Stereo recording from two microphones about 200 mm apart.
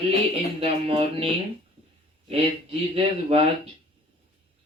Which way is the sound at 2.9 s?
30° right (ahead or behind).